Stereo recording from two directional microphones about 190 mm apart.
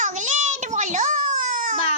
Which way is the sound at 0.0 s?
40° right (ahead or behind).